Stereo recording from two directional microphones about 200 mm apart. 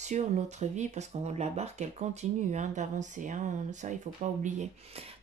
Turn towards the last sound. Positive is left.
turn(degrees=-35)  # may be behind; listen again after turning